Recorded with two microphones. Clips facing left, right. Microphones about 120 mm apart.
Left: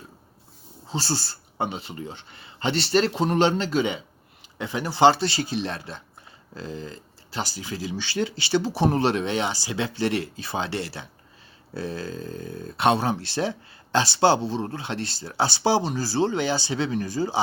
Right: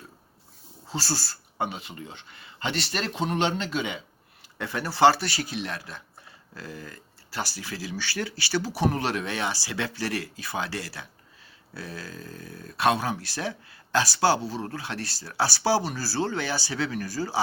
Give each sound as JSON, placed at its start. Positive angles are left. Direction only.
{"t": 0.9, "sound": "speech", "side_deg": 25}
{"t": 4.5, "sound": "speech", "side_deg": 15}